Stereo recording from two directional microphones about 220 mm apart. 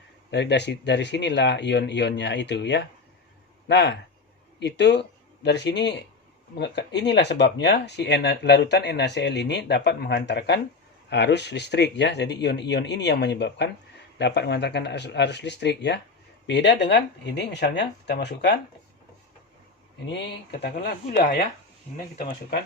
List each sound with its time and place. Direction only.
0.3 s speech: 50° left (ahead or behind)
20.1 s speech: 50° left (ahead or behind)